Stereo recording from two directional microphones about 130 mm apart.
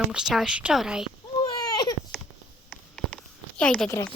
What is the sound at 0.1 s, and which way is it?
Speech, 5° right (ahead or behind).